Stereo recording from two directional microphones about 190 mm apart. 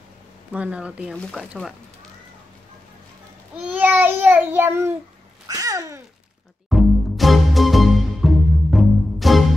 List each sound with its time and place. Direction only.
0.5 s child singing: 5° right (ahead or behind)
1.1 s speech: centre (ahead or behind)
3.6 s child singing: 10° right (ahead or behind)
5.5 s babbling: 15° right (ahead or behind)
6.7 s music: centre (ahead or behind)